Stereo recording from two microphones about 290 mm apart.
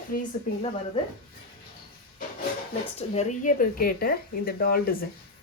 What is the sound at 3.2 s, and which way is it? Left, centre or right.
A woman's voice, left.